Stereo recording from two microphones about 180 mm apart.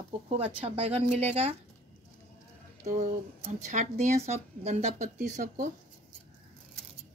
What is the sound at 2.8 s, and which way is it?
Speech, 40° right (ahead or behind).